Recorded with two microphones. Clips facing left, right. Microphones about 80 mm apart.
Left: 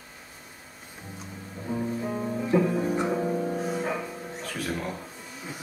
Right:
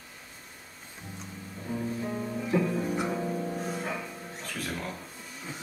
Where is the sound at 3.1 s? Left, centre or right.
Centre.